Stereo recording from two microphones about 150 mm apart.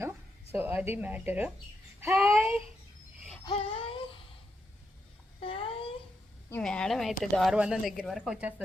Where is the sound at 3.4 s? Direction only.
40° left (ahead or behind).